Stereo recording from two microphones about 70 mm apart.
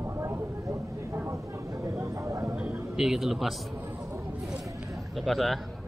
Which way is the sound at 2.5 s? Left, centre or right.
Centre.